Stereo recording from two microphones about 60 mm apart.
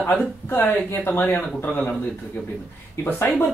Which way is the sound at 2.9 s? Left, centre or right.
Left.